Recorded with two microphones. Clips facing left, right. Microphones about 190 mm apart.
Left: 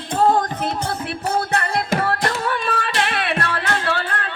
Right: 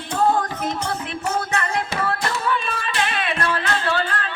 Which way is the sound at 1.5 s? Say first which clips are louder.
Left 3 dB; 35° left (ahead or behind).